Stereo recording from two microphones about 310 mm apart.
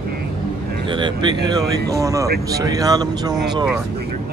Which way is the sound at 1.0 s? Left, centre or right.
Centre.